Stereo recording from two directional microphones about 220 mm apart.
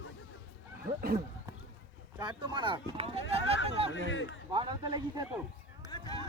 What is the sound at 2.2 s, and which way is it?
Speech, 20° right (ahead or behind).